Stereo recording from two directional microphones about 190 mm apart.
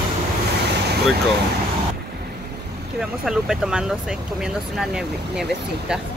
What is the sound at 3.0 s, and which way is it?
Speech, centre (ahead or behind).